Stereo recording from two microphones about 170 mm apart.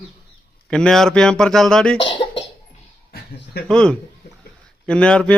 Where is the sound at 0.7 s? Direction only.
5° left (ahead or behind).